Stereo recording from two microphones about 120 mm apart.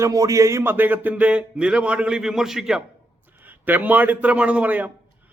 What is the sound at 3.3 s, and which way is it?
A man's voice, 15° right (ahead or behind).